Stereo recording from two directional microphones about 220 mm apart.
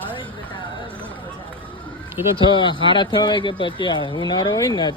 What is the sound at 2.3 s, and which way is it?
Speech, 20° left (ahead or behind).